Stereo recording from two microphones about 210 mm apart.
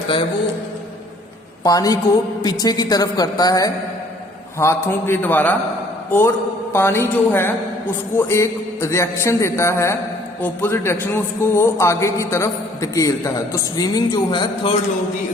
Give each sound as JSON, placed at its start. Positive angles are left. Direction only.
{"t": 1.6, "sound": "a man's voice", "side_deg": 15}